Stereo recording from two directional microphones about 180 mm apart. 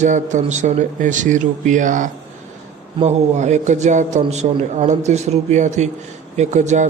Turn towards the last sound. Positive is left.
turn(degrees=-40)  # may be behind; listen again after turning